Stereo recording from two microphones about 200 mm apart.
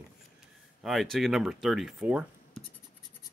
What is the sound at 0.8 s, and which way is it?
Speech, centre (ahead or behind).